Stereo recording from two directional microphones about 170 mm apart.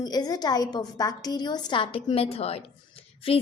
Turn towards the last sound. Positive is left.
turn(degrees=35)  # may be behind; listen again after turning